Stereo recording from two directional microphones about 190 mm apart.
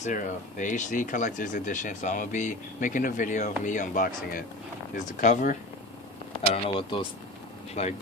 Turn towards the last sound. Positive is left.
turn(degrees=35)  # may be behind; listen again after turning